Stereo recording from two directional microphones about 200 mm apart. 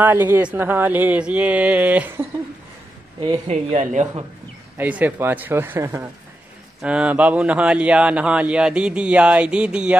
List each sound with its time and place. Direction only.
0.0 s speech: 10° right (ahead or behind)
3.2 s speech: 30° right (ahead or behind)
4.7 s speech: 10° right (ahead or behind)